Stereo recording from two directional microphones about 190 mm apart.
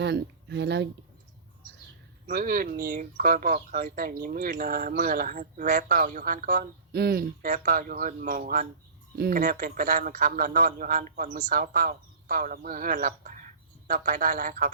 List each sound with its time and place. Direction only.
0.0 s speech: 60° right (ahead or behind)
2.2 s speech: 45° right (ahead or behind)